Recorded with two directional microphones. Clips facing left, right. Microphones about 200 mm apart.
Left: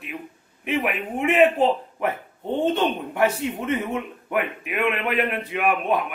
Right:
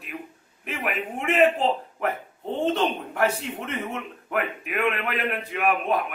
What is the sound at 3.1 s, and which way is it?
A man's voice, 10° left (ahead or behind).